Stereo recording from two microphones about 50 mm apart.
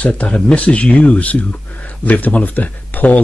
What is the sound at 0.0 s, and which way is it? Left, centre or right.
Speech, left.